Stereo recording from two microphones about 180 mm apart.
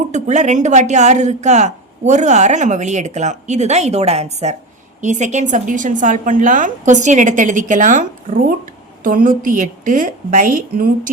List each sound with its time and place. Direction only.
0.1 s a woman's voice: 40° right (ahead or behind)